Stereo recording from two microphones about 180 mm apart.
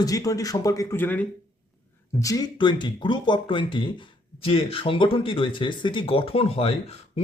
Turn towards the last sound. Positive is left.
turn(degrees=35)  # may be behind; listen again after turning